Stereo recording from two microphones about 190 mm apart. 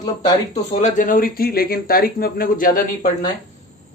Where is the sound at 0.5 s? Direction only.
35° left (ahead or behind).